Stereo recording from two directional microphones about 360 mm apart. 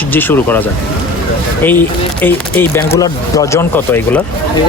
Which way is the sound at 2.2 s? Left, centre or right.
Centre.